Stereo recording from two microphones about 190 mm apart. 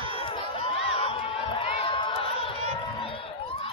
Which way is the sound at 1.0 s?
30° left (ahead or behind).